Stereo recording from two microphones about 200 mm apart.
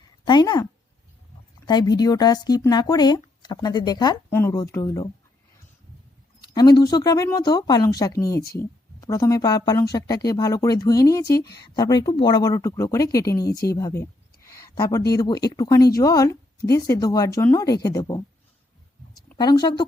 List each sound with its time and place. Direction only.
0.3 s speech: 20° left (ahead or behind)
6.5 s speech: 20° left (ahead or behind)
14.4 s a sound: 15° left (ahead or behind)
15.1 s speech: 20° left (ahead or behind)
19.4 s speech: 20° left (ahead or behind)